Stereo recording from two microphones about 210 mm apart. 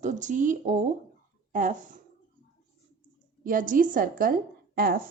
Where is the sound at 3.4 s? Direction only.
40° right (ahead or behind).